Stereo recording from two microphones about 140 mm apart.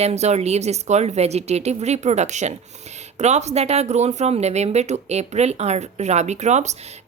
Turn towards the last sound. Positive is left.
turn(degrees=-55)  # may be behind; listen again after turning